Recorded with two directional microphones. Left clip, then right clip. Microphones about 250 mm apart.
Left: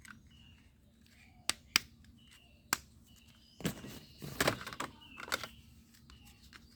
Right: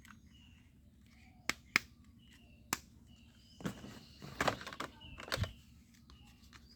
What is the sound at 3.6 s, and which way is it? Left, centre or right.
Walk, left.